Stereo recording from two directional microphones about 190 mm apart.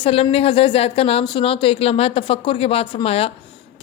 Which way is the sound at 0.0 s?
30° left (ahead or behind).